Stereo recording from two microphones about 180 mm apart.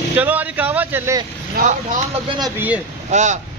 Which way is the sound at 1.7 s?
40° right (ahead or behind).